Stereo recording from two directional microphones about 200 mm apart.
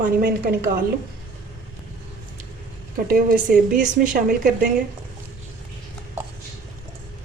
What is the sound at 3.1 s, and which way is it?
A woman's voice, 45° right (ahead or behind).